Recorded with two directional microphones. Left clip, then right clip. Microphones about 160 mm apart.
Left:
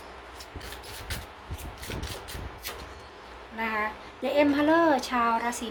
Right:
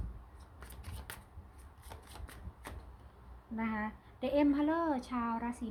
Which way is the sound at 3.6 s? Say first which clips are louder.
Left 10 dB; 30° right (ahead or behind).